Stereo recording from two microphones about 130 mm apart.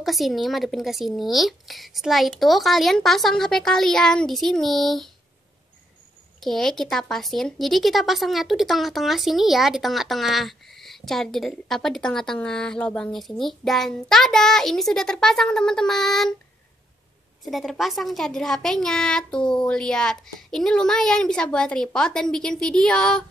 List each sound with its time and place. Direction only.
0.0 s speech: centre (ahead or behind)
6.4 s speech: 5° left (ahead or behind)
17.5 s speech: centre (ahead or behind)